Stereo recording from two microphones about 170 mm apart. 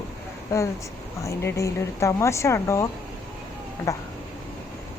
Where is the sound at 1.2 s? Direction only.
15° left (ahead or behind).